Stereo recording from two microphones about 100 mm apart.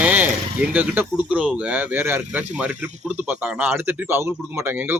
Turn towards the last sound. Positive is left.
turn(degrees=-20)  # may be behind; listen again after turning